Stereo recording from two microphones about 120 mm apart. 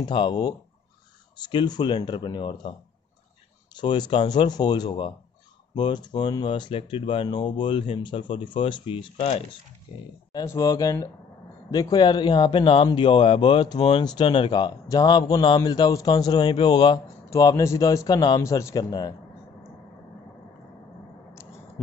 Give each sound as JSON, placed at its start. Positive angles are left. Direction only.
{"t": 0.0, "sound": "speech", "side_deg": 40}
{"t": 3.7, "sound": "speech", "side_deg": 40}
{"t": 9.9, "sound": "speech", "side_deg": 40}
{"t": 10.3, "sound": "a man's voice", "side_deg": 25}
{"t": 18.4, "sound": "a man's voice", "side_deg": 25}